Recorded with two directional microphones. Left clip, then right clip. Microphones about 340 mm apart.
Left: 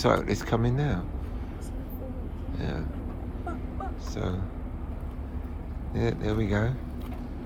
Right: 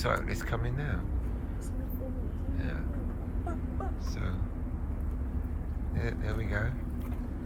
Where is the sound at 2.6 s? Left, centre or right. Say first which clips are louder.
Left 6 dB; centre.